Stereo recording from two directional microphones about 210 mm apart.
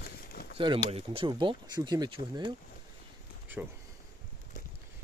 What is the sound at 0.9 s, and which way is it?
Speech, 25° right (ahead or behind).